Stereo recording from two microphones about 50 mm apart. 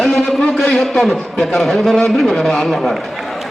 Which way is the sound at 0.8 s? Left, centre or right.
Centre.